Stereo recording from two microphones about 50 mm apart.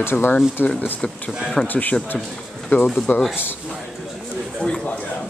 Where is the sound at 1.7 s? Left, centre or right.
Left.